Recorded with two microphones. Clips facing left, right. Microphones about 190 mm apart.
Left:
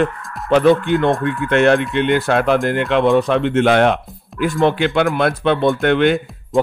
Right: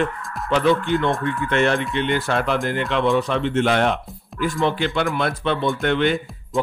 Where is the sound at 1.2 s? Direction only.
60° left (ahead or behind).